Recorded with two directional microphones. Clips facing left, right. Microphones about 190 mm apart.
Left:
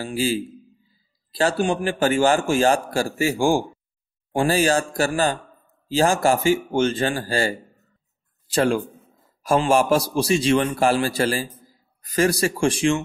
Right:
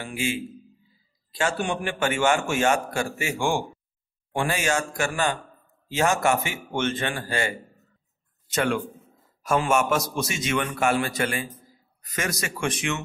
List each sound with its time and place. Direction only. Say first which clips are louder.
0.0 s a man's voice: left 5 dB; 35° left (ahead or behind)